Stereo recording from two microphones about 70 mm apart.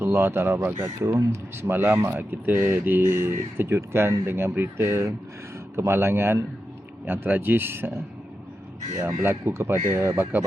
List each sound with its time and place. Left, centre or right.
0.0 s speech: right
0.8 s speech: right
1.7 s speech: right
9.2 s speech: right